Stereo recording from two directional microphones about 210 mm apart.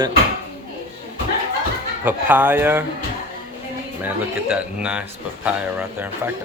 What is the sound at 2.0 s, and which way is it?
Speech, 10° right (ahead or behind).